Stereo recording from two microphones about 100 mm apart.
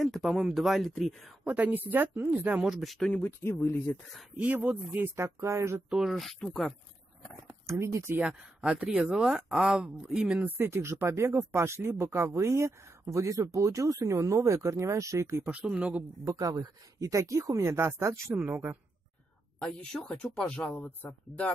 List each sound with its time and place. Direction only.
0.0 s speech: centre (ahead or behind)
1.4 s speech: 15° right (ahead or behind)
2.7 s speech: centre (ahead or behind)
3.1 s speech: 20° left (ahead or behind)
4.4 s speech: 15° right (ahead or behind)
5.9 s speech: 5° right (ahead or behind)
7.6 s speech: 30° right (ahead or behind)
8.2 s speech: 10° right (ahead or behind)
10.6 s speech: 25° right (ahead or behind)
15.5 s speech: 15° right (ahead or behind)
16.3 s speech: 35° right (ahead or behind)
19.6 s speech: 10° left (ahead or behind)